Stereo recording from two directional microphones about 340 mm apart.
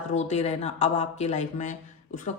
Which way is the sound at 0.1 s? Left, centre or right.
Centre.